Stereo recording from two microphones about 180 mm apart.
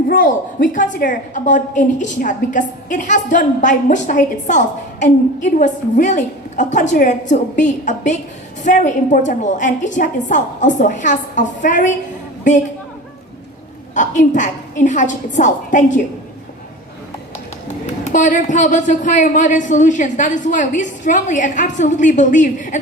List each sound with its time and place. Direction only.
0.1 s a woman's voice: 50° left (ahead or behind)
13.9 s a woman's voice: 45° left (ahead or behind)
18.0 s a woman's voice: 45° left (ahead or behind)